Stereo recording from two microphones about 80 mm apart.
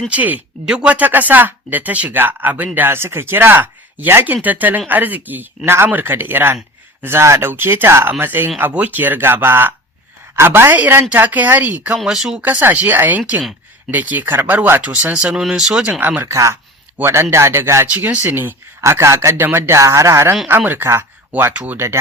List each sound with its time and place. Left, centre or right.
0.1 s speech: right
11.9 s speech: centre
12.4 s speech: centre
15.9 s speech: centre
16.2 s speech: right
17.9 s speech: centre
18.8 s speech: right
20.6 s speech: right